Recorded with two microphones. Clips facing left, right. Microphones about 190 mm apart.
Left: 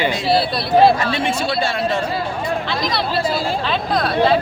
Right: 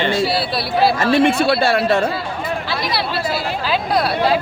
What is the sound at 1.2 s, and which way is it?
Speech, 60° right (ahead or behind).